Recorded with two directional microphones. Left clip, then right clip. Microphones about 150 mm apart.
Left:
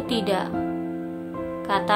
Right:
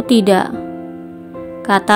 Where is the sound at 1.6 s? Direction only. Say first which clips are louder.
Right 9 dB; 50° right (ahead or behind).